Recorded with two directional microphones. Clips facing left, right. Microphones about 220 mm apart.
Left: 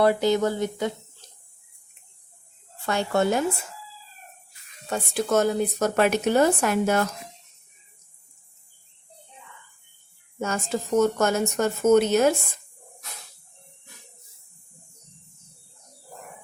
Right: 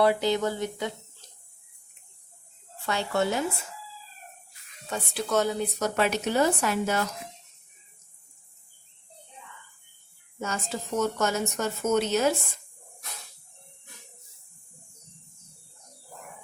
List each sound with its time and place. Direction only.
0.0 s speech: 45° left (ahead or behind)
2.8 s speech: 45° left (ahead or behind)
4.9 s speech: 45° left (ahead or behind)
10.4 s speech: 50° left (ahead or behind)